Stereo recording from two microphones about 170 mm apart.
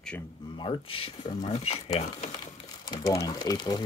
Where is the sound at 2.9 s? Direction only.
20° left (ahead or behind).